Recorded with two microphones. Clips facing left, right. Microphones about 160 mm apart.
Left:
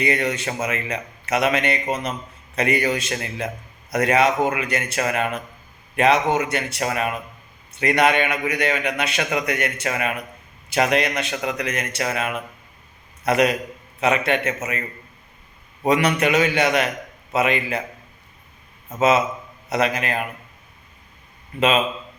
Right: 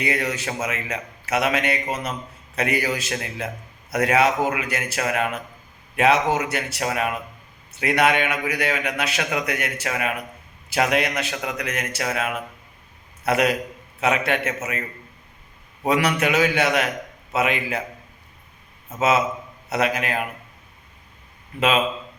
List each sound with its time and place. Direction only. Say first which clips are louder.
0.0 s a man's voice: left 3 dB; 5° right (ahead or behind)
18.9 s a man's voice: left 2 dB; 5° right (ahead or behind)